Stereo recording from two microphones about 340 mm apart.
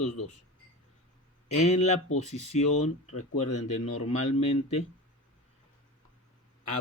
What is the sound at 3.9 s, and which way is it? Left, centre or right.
Speech, centre.